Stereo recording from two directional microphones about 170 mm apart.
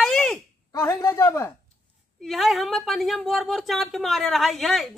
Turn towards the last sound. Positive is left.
turn(degrees=0)  # may be behind; listen again after turning